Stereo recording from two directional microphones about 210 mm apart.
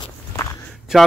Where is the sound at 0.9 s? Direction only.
Centre (ahead or behind).